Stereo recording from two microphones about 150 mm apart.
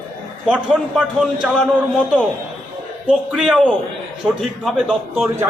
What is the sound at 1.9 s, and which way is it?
Speech, 5° right (ahead or behind).